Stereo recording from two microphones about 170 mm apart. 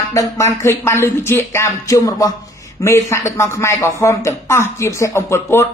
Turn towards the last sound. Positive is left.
turn(degrees=15)  # may be behind; listen again after turning